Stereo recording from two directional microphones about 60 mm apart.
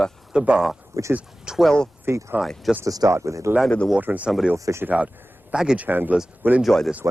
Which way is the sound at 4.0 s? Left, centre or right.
Right.